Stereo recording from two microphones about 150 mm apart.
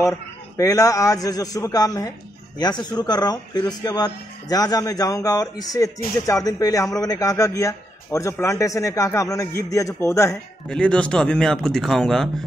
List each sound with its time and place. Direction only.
0.6 s a man's voice: 20° left (ahead or behind)
10.7 s speech: 5° left (ahead or behind)